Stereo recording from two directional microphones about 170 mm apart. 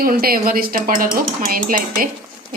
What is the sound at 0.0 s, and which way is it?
A woman's voice, 60° right (ahead or behind).